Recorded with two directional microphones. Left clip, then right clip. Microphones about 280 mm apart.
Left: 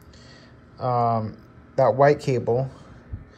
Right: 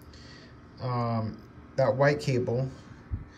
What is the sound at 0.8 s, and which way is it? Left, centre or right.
Speech, centre.